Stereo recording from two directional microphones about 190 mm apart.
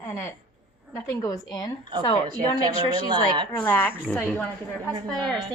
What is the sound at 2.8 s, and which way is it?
Speech, 20° right (ahead or behind).